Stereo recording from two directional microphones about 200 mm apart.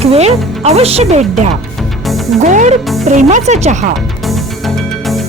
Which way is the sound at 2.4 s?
35° right (ahead or behind).